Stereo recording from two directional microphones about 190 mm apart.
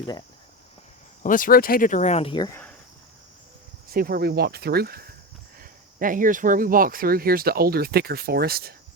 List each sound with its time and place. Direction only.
1.2 s speech: 45° left (ahead or behind); by 2.5 s 25° left (ahead or behind)
3.9 s speech: 50° right (ahead or behind)